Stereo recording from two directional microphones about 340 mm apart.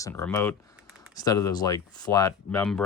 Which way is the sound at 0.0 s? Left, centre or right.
Centre.